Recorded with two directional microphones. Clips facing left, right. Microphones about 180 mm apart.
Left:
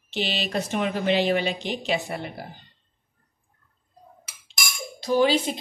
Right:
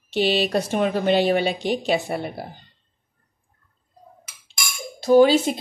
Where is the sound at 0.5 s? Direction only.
35° right (ahead or behind).